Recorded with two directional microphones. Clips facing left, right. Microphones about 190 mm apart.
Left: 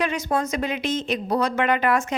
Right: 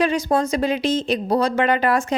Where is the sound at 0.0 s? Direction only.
35° right (ahead or behind).